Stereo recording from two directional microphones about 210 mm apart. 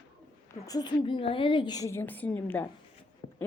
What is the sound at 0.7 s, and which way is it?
A woman's voice, 20° left (ahead or behind).